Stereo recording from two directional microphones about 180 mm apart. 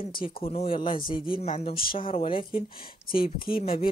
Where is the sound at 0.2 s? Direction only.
30° left (ahead or behind).